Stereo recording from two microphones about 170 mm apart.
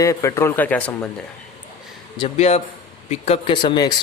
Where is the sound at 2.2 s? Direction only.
40° left (ahead or behind).